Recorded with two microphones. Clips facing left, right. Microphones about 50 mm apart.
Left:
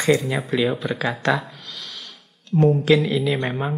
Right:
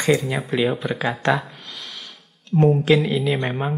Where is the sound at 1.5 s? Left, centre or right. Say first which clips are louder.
Even; centre.